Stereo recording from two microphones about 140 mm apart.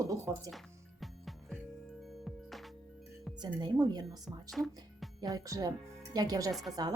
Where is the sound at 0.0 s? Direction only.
20° right (ahead or behind).